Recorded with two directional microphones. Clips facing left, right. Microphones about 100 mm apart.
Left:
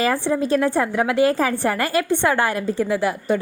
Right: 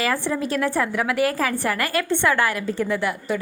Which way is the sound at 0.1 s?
25° left (ahead or behind).